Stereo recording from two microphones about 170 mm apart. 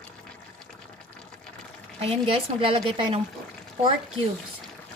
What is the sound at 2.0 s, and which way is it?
A woman's voice, 35° right (ahead or behind).